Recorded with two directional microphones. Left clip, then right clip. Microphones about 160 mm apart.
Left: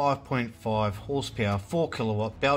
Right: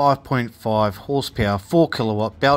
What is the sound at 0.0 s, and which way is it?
Speech, 45° right (ahead or behind).